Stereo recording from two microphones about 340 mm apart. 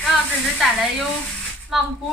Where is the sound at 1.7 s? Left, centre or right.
Centre.